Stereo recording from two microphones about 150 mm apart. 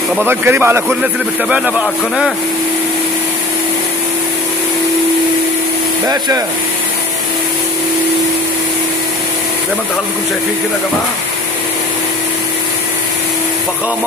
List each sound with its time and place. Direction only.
0.2 s a man's voice: 15° right (ahead or behind)
6.0 s speech: 25° right (ahead or behind)